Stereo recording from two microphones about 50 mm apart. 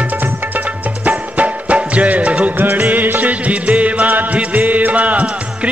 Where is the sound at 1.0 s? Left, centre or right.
Right.